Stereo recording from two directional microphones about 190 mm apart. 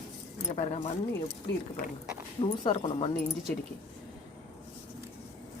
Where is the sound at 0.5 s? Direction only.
35° left (ahead or behind).